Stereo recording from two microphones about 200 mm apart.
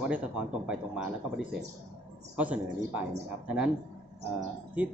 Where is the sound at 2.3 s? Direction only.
5° right (ahead or behind).